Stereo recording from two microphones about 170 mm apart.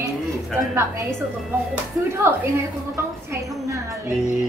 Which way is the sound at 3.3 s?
20° right (ahead or behind).